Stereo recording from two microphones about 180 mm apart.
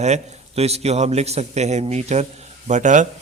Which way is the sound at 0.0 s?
35° right (ahead or behind).